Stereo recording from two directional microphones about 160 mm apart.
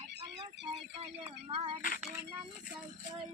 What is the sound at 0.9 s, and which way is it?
Speech, 35° right (ahead or behind).